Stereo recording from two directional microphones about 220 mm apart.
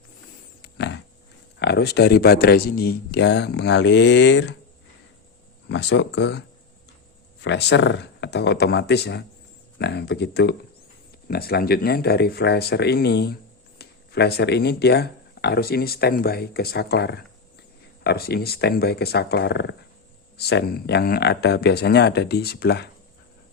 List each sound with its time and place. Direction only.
0.6 s pig: 50° left (ahead or behind)
1.5 s speech: 50° left (ahead or behind)
5.6 s speech: 50° left (ahead or behind)
7.4 s speech: 50° left (ahead or behind)